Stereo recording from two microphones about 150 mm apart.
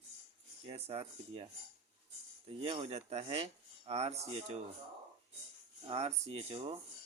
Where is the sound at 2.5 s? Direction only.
40° right (ahead or behind).